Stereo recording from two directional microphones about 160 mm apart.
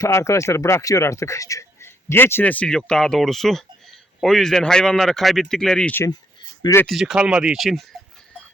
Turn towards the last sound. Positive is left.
turn(degrees=0)  # may be behind; listen again after turning